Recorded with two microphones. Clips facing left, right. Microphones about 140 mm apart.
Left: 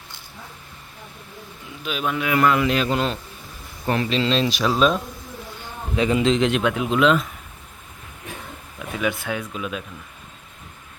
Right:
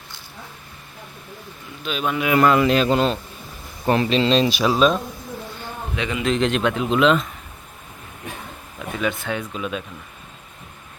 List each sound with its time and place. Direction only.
1.8 s speech: 5° left (ahead or behind)
2.4 s speech: 35° right (ahead or behind); by 4.9 s 5° right (ahead or behind)
6.0 s a man's voice: 35° left (ahead or behind)
6.2 s speech: 15° left (ahead or behind)
9.0 s speech: 10° left (ahead or behind)